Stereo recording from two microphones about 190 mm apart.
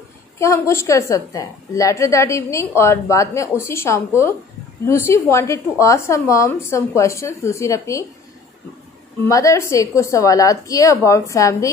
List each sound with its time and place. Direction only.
0.4 s a woman's voice: 15° left (ahead or behind)
9.3 s a woman's voice: 15° left (ahead or behind)